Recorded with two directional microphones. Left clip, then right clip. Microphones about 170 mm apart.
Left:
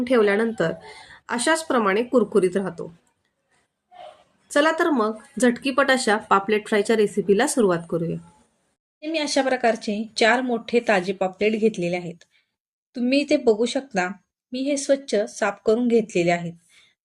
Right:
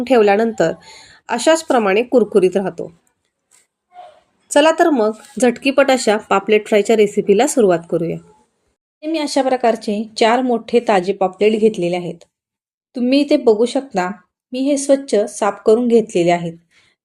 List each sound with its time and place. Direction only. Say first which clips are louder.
0.0 s a woman's voice: right 7 dB; 20° right (ahead or behind)
4.4 s speech: right 7 dB; 15° right (ahead or behind)